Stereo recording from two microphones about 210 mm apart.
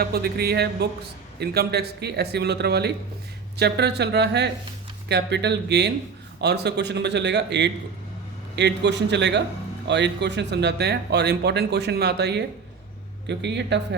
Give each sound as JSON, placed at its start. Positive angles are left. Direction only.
{"t": 0.0, "sound": "a man's voice", "side_deg": -50}